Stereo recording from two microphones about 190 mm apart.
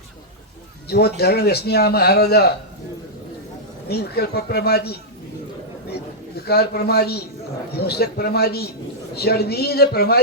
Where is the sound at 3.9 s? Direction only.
55° left (ahead or behind).